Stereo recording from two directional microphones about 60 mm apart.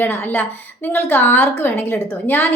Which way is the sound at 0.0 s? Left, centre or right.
Left.